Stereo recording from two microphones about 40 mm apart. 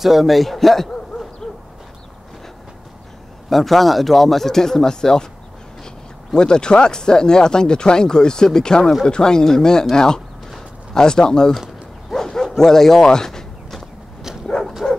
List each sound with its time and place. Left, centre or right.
0.0 s speech: centre
3.4 s speech: centre
6.3 s speech: left
12.1 s bow-wow: centre
14.8 s dog: left